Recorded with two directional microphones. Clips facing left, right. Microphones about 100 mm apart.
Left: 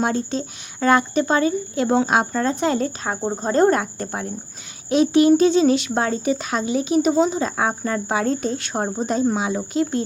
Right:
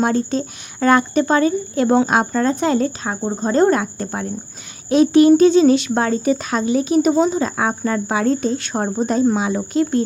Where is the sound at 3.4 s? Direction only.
40° left (ahead or behind).